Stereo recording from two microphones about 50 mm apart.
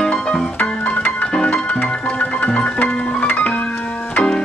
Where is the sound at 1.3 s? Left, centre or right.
Centre; by 3.6 s left.